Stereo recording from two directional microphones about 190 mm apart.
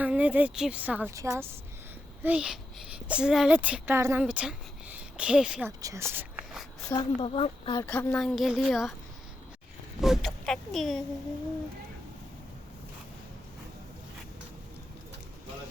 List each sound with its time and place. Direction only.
0.0 s speech: 5° right (ahead or behind)
5.8 s speech: 15° right (ahead or behind)
6.9 s speech: 25° left (ahead or behind)
7.8 s speech: 10° left (ahead or behind)
10.0 s speech: centre (ahead or behind)